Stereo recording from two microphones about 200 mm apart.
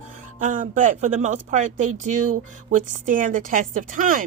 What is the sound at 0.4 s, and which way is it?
A woman's voice, 40° right (ahead or behind).